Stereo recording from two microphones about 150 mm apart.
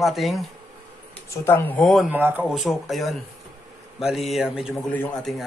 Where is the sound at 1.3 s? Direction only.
15° left (ahead or behind).